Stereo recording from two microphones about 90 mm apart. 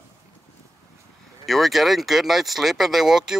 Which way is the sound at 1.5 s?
Centre (ahead or behind).